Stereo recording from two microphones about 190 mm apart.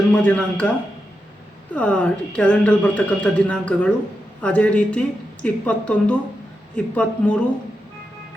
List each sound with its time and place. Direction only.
0.1 s speech: 5° left (ahead or behind)
1.7 s a woman's voice: 5° left (ahead or behind)